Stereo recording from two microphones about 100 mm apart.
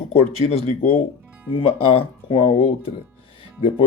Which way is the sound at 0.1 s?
90° left.